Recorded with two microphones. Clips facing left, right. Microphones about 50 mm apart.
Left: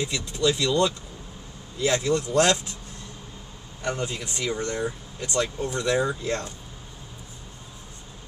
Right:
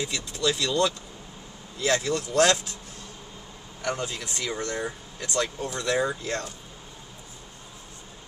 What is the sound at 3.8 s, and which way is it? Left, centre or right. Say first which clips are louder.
Speech: left 1 dB; left.